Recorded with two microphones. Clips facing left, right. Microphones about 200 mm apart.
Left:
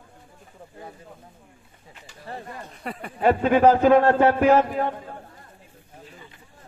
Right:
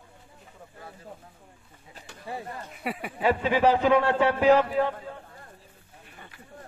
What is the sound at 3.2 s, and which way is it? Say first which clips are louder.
A man's voice: left 5 dB; 55° left (ahead or behind).